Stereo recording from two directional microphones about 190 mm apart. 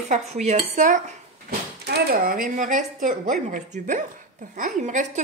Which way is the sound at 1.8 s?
55° right (ahead or behind).